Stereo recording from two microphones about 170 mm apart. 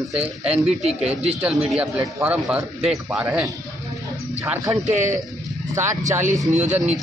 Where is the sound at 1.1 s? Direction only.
35° right (ahead or behind).